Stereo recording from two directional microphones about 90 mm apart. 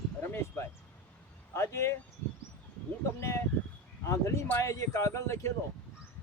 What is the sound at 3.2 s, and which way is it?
A man's voice, 30° left (ahead or behind).